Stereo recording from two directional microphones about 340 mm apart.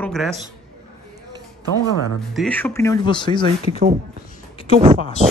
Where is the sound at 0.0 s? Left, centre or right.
Centre.